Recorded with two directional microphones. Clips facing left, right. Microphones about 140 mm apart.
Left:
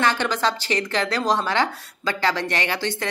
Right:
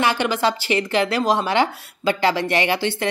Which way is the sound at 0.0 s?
10° right (ahead or behind).